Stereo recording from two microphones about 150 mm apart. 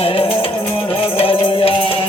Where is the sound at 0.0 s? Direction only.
40° left (ahead or behind).